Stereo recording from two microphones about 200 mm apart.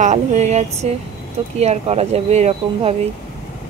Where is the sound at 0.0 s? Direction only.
35° right (ahead or behind).